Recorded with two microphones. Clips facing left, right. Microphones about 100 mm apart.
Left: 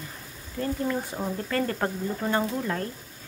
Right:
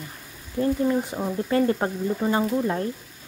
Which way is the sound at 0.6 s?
20° right (ahead or behind).